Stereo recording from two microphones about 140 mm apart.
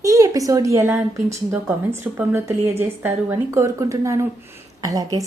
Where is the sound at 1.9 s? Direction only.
15° right (ahead or behind).